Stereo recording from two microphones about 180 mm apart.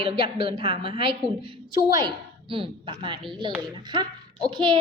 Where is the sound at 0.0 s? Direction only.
30° right (ahead or behind).